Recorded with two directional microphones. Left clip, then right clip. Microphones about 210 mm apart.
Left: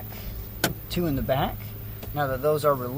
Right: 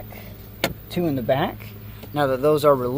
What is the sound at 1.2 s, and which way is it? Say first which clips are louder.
Speech: right 5 dB; 35° right (ahead or behind).